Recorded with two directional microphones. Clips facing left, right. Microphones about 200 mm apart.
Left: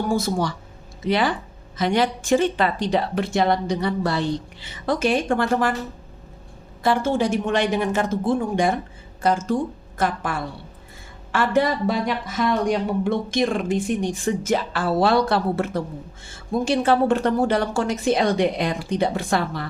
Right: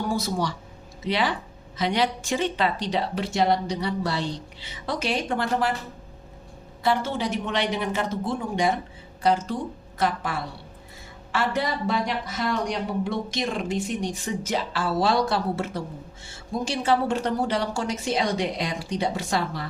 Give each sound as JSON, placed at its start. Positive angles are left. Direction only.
{"t": 0.1, "sound": "speech", "side_deg": 50}
{"t": 6.8, "sound": "a woman's voice", "side_deg": 45}